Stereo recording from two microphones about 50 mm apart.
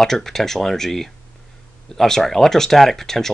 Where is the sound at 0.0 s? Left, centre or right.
Centre.